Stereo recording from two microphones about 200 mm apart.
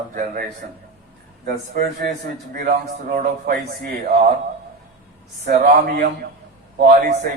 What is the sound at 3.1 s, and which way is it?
A man's voice, 45° right (ahead or behind).